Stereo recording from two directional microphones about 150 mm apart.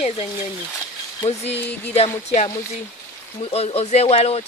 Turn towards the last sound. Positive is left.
turn(degrees=45)  # may be behind; listen again after turning